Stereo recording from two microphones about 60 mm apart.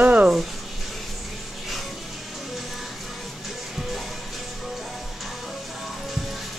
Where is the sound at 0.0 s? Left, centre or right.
Right.